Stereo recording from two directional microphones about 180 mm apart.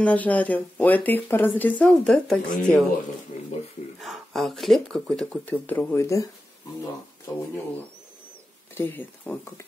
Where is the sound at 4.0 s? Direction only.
Centre (ahead or behind); by 6.3 s 15° left (ahead or behind).